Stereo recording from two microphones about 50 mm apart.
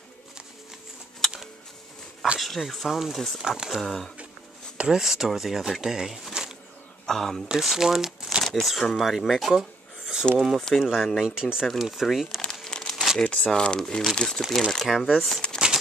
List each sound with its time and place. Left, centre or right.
2.3 s speech: centre
3.4 s speech: centre
6.4 s a sound: centre
7.1 s speech: centre
7.4 s speech: centre
9.5 s a sound: centre
10.4 s speech: centre
10.8 s speech: centre
12.6 s crumpling: centre
12.9 s crumpling: centre
13.5 s speech: centre
14.4 s speech: centre